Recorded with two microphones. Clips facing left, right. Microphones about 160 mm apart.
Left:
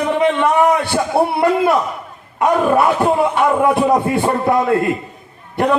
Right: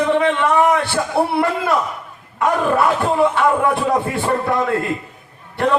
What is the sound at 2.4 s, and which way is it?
Speech, 20° left (ahead or behind).